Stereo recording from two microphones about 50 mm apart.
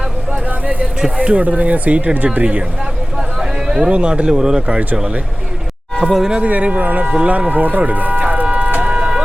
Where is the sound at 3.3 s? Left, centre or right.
Centre.